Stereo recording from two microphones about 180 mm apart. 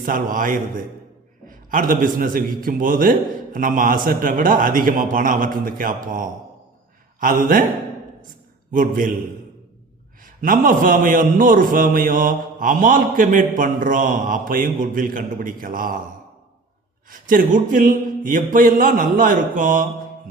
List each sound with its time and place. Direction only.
0.0 s a man's voice: 50° right (ahead or behind)
8.7 s a man's voice: 50° right (ahead or behind)
10.2 s a man's voice: 50° right (ahead or behind)
17.1 s a man's voice: 50° right (ahead or behind)